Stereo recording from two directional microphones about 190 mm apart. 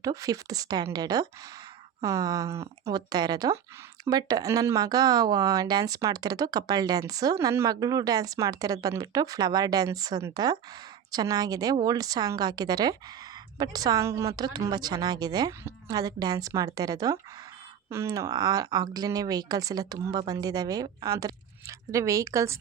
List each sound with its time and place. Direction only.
0.0 s speech: 20° right (ahead or behind)